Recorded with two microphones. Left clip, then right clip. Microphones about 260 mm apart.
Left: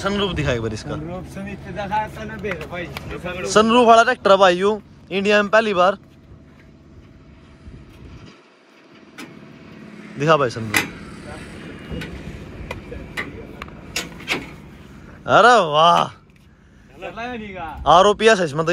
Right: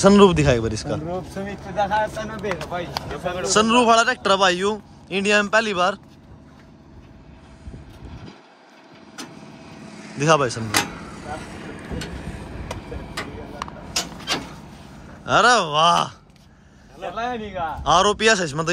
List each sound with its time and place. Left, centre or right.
0.0 s speech: right; by 5.9 s centre
9.7 s vehicle: right
10.1 s speech: centre
10.9 s vehicle: right
13.9 s a sound: centre
15.2 s speech: centre
17.1 s speech: right
17.8 s speech: centre